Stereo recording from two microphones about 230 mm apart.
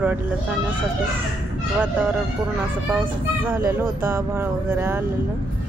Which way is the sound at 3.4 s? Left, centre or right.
Centre.